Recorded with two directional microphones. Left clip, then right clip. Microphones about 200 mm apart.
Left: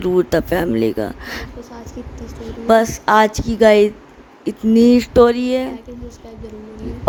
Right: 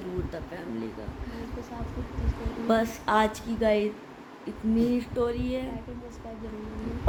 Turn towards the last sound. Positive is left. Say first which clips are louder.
# left 9 dB
turn(degrees=50)  # may be behind; listen again after turning